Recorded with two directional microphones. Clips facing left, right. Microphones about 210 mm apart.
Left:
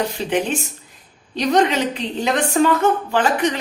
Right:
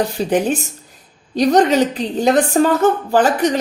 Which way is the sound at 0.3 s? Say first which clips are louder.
Right 4 dB; 35° right (ahead or behind).